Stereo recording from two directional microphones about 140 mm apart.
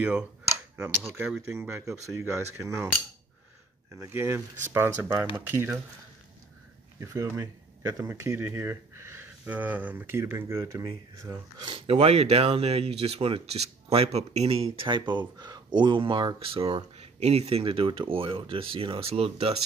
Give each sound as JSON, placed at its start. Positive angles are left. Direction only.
{"t": 0.0, "sound": "speech", "side_deg": -5}
{"t": 4.0, "sound": "speech", "side_deg": -20}
{"t": 7.0, "sound": "speech", "side_deg": -20}
{"t": 11.2, "sound": "speech", "side_deg": -35}